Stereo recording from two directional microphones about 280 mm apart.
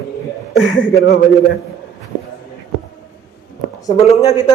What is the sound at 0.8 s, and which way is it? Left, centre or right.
Speech, left.